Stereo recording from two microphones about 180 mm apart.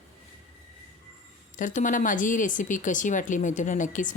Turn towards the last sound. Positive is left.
turn(degrees=45)  # may be behind; listen again after turning